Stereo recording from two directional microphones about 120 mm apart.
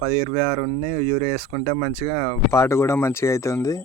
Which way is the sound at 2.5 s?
20° left (ahead or behind).